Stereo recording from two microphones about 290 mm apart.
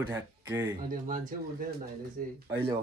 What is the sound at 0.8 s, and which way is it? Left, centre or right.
Speech, right.